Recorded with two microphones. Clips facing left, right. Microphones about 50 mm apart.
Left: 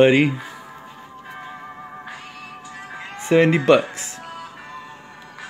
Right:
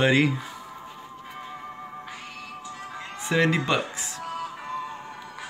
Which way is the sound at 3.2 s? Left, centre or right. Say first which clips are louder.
Left 7 dB; left.